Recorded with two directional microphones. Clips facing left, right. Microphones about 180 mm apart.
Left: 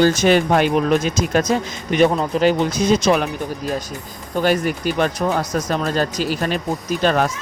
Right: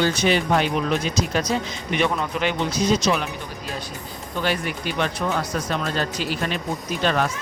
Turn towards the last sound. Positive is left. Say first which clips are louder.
# left 4 dB
turn(degrees=40)  # may be behind; listen again after turning